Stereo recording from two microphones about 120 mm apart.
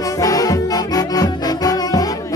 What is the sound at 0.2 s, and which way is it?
Music, 30° left (ahead or behind).